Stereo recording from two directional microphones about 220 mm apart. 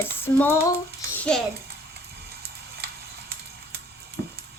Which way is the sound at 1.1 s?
5° left (ahead or behind).